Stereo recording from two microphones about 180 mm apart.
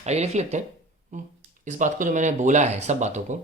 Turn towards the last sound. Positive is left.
turn(degrees=-40)  # may be behind; listen again after turning